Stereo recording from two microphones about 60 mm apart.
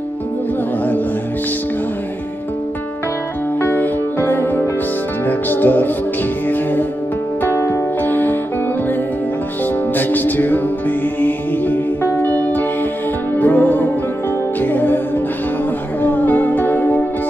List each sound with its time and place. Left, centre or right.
3.6 s music: left
9.9 s music: left